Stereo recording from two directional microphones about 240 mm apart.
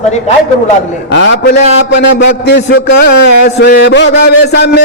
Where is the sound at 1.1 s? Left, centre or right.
Left.